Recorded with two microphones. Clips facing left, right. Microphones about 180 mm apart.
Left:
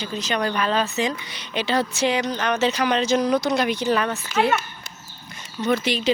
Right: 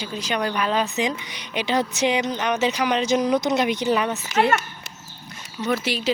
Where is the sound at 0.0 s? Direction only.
10° right (ahead or behind).